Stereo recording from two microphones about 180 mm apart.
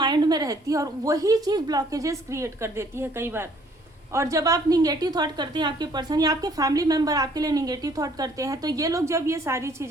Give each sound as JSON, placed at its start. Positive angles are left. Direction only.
{"t": 0.0, "sound": "a woman's voice", "side_deg": -25}